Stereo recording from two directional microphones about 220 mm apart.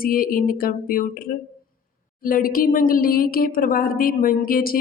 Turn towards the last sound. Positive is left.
turn(degrees=40)  # may be behind; listen again after turning